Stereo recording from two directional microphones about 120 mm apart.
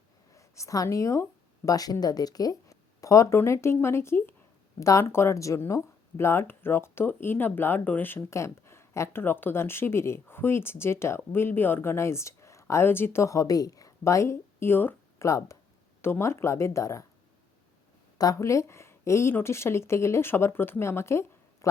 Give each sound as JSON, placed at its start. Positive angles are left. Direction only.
{"t": 0.3, "sound": "a woman's voice", "side_deg": 25}
{"t": 18.2, "sound": "speech", "side_deg": 30}